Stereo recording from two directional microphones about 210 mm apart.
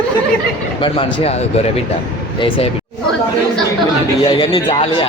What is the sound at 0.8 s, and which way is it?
Speech, 25° left (ahead or behind).